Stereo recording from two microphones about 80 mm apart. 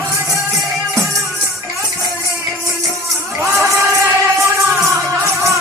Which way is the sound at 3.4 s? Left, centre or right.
Right.